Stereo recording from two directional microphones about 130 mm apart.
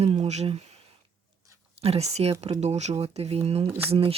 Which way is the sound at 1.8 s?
55° right (ahead or behind).